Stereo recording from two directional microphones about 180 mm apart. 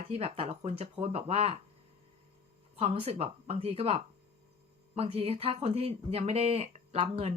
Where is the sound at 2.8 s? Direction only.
35° right (ahead or behind).